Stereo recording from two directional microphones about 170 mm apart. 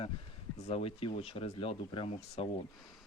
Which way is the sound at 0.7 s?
35° left (ahead or behind).